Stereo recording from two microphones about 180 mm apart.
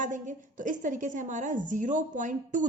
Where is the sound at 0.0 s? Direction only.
45° right (ahead or behind).